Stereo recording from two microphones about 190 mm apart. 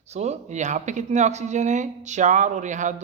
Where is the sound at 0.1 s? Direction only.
35° right (ahead or behind).